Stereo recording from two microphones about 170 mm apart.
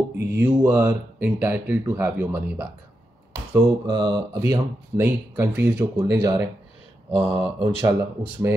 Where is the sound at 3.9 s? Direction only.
25° right (ahead or behind).